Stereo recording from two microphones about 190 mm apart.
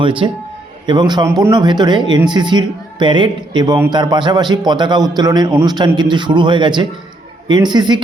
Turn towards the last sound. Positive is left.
turn(degrees=-20)  # may be behind; listen again after turning